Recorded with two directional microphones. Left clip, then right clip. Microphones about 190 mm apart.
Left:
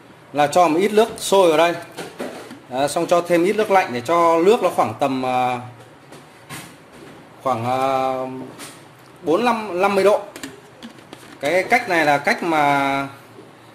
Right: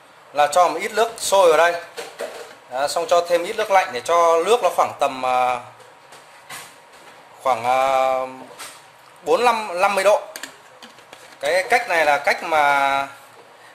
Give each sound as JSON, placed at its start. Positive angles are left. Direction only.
{"t": 0.3, "sound": "speech", "side_deg": 0}
{"t": 2.7, "sound": "speech", "side_deg": 5}
{"t": 7.4, "sound": "a man's voice", "side_deg": -25}
{"t": 11.4, "sound": "speech", "side_deg": 0}